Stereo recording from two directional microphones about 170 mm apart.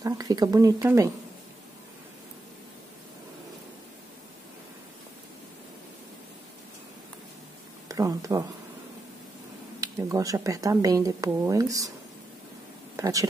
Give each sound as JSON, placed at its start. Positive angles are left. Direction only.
{"t": 0.0, "sound": "speech", "side_deg": -20}
{"t": 7.9, "sound": "speech", "side_deg": -20}
{"t": 9.8, "sound": "speech", "side_deg": -20}
{"t": 12.9, "sound": "speech", "side_deg": -20}